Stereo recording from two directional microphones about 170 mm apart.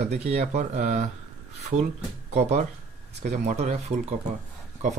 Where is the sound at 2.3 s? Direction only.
40° right (ahead or behind).